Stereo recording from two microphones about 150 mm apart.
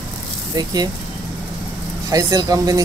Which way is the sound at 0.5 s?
25° right (ahead or behind).